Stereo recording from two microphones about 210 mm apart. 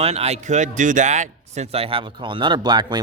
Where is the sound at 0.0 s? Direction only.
30° right (ahead or behind).